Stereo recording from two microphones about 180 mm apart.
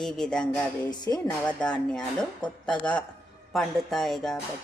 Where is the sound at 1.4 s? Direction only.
5° left (ahead or behind).